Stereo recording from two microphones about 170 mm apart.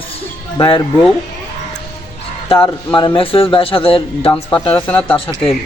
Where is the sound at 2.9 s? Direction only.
30° left (ahead or behind).